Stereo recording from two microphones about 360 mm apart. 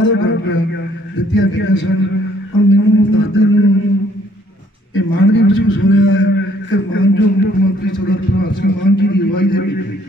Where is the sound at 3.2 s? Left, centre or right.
Left.